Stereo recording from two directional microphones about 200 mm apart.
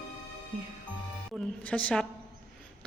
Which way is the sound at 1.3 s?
5° left (ahead or behind).